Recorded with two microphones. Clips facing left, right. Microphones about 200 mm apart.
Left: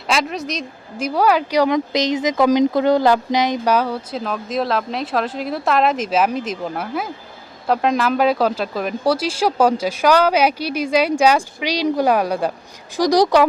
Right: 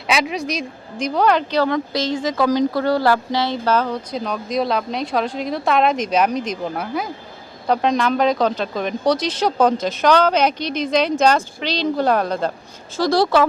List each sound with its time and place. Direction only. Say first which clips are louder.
0.1 s speech: right 1 dB; centre (ahead or behind); by 13.5 s 15° left (ahead or behind)